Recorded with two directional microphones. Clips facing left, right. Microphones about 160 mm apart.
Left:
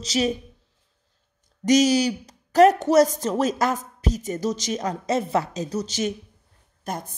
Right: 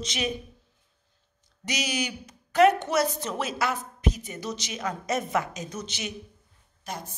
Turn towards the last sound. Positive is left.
turn(degrees=50)  # may be behind; listen again after turning